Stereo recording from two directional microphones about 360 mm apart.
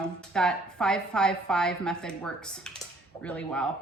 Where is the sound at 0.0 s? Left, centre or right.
Centre.